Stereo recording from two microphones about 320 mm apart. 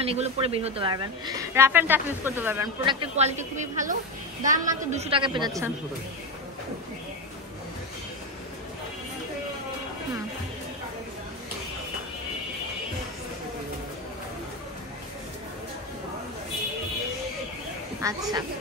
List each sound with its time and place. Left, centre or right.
0.0 s a woman's voice: centre
18.0 s a woman's voice: centre